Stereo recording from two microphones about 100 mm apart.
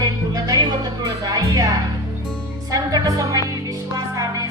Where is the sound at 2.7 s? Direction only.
35° right (ahead or behind).